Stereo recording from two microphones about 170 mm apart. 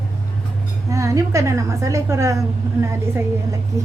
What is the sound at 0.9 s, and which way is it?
A woman's voice, 20° right (ahead or behind).